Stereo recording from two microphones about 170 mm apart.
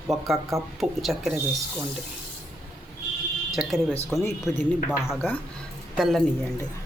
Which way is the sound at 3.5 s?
Centre (ahead or behind).